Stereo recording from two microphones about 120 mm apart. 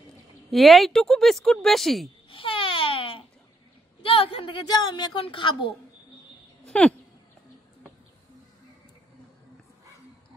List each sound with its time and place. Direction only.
0.5 s speech: centre (ahead or behind)
2.2 s babbling: 45° left (ahead or behind)
4.0 s a woman's voice: 50° left (ahead or behind)
6.7 s speech: 5° left (ahead or behind)